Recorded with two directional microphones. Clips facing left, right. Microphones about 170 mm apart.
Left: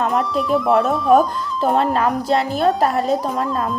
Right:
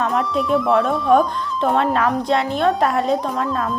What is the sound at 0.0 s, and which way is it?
Speech, centre (ahead or behind).